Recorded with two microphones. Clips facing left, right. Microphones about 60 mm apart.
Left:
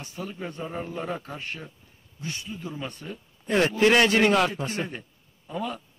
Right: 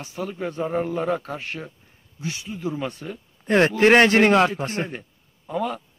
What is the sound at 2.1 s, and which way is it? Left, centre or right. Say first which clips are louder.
Speech: right 4 dB; right.